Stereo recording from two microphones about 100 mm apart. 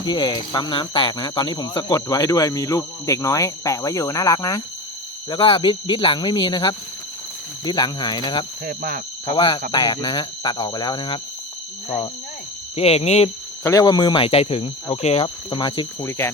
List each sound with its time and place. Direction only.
0.0 s speech: 50° left (ahead or behind)
5.3 s speech: 60° left (ahead or behind)
9.2 s speech: 60° left (ahead or behind)
9.8 s speech: 45° left (ahead or behind)
12.7 s speech: 90° left
13.7 s speech: 40° left (ahead or behind)
14.2 s speech: 75° left (ahead or behind)
15.2 s speech: 50° left (ahead or behind)
16.0 s speech: 25° left (ahead or behind)